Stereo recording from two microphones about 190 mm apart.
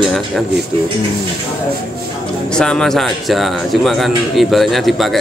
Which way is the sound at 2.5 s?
5° left (ahead or behind).